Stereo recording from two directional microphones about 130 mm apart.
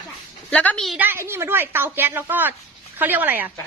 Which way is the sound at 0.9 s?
15° right (ahead or behind).